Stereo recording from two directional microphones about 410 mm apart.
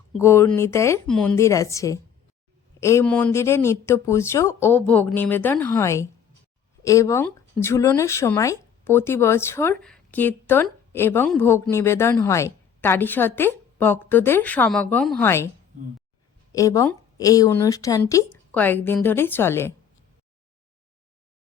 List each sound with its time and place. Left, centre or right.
0.1 s a woman's voice: centre
16.5 s a woman's voice: centre